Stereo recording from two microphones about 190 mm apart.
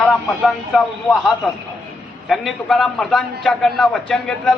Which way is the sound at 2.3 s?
Centre (ahead or behind).